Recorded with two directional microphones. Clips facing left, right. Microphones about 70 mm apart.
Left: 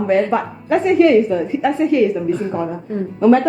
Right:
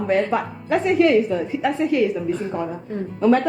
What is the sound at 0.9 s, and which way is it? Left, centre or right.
A woman's voice, left.